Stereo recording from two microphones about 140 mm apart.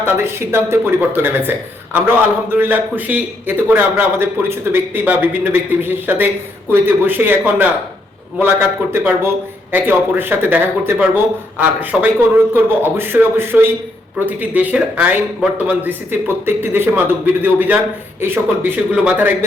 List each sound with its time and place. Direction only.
0.0 s speech: 15° right (ahead or behind)